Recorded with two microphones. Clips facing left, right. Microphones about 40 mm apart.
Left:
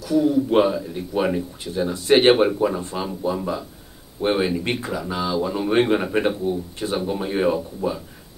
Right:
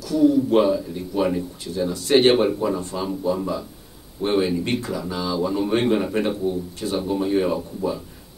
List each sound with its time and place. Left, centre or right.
0.0 s speech: centre